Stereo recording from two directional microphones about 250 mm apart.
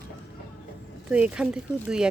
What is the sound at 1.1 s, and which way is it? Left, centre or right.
Speech, centre.